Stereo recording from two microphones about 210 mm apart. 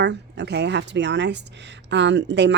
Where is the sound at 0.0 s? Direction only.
55° right (ahead or behind).